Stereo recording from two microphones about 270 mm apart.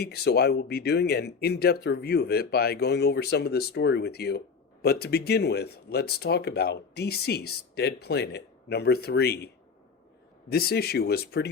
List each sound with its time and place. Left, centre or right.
0.0 s speech: left
10.5 s speech: left